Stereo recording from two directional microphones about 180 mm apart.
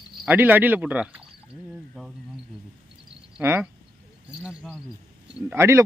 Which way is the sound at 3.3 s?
10° right (ahead or behind).